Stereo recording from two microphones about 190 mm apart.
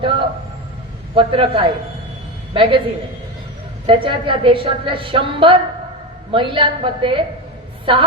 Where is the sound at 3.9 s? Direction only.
25° right (ahead or behind).